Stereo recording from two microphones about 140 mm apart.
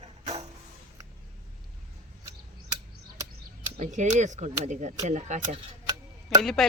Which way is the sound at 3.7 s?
55° right (ahead or behind).